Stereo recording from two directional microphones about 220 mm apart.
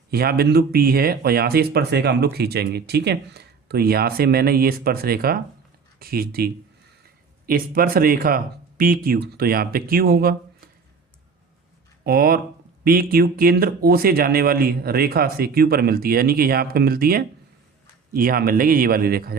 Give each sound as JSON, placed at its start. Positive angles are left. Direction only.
{"t": 0.1, "sound": "speech", "side_deg": -45}
{"t": 12.0, "sound": "speech", "side_deg": -45}